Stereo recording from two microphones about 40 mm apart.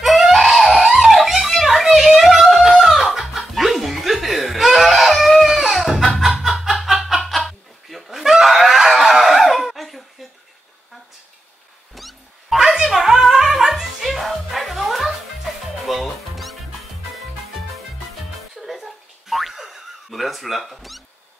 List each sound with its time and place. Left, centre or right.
0.0 s screaming: centre
0.8 s music: centre
6.2 s snicker: centre
11.9 s cat: centre
12.5 s a sound: centre
13.2 s music: centre
14.0 s music: centre
18.7 s boing: centre